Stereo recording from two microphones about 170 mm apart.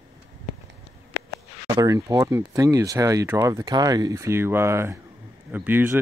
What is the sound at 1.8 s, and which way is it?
Speech, 20° right (ahead or behind).